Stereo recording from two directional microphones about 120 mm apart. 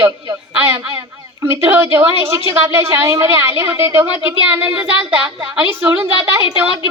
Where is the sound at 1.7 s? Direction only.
15° right (ahead or behind).